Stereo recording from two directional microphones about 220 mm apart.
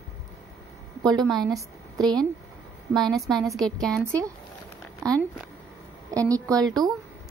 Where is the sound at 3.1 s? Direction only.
Centre (ahead or behind).